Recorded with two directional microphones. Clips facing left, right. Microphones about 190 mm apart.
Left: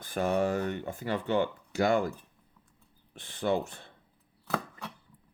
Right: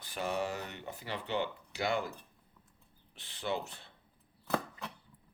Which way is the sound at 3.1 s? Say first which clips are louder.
Left 7 dB; 50° left (ahead or behind).